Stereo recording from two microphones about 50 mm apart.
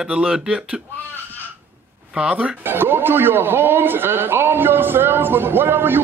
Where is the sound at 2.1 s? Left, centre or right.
Centre.